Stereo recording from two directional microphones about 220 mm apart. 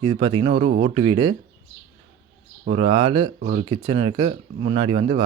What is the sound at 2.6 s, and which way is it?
Speech, 30° right (ahead or behind).